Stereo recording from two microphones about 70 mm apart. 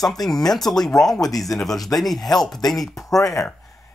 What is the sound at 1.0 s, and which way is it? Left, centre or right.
Speech, left.